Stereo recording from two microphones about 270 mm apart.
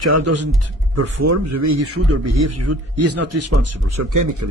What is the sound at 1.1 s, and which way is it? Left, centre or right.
A man's voice, right.